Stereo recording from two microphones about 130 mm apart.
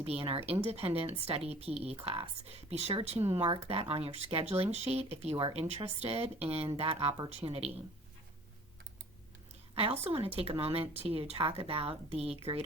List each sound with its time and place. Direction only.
0.0 s speech: 50° right (ahead or behind)
9.7 s speech: 50° right (ahead or behind)